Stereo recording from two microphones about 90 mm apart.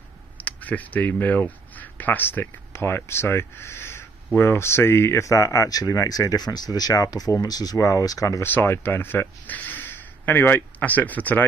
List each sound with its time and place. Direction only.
0.4 s speech: 15° left (ahead or behind); by 8.5 s 40° left (ahead or behind)
8.5 s speech: 25° left (ahead or behind)